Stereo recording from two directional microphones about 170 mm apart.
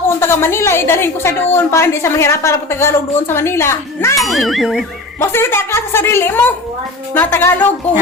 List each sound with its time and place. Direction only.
0.2 s a woman's voice: 15° left (ahead or behind)
4.2 s speech: centre (ahead or behind)
5.2 s a woman's voice: 15° left (ahead or behind)